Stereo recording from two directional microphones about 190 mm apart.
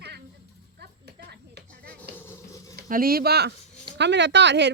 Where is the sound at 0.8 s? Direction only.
60° right (ahead or behind).